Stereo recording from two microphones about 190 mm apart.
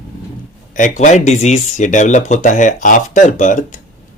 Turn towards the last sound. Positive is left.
turn(degrees=40)  # may be behind; listen again after turning